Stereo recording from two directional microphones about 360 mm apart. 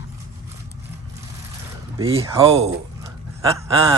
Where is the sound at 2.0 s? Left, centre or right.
Centre.